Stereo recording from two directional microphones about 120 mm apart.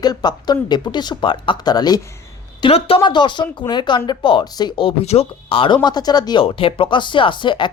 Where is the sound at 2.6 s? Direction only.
45° left (ahead or behind).